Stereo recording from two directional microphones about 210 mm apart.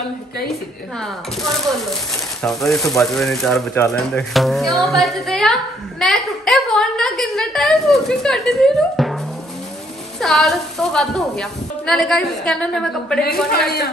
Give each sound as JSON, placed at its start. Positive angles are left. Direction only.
{"t": 2.4, "sound": "speech", "side_deg": 0}
{"t": 10.2, "sound": "speech", "side_deg": 0}
{"t": 13.5, "sound": "speech", "side_deg": 50}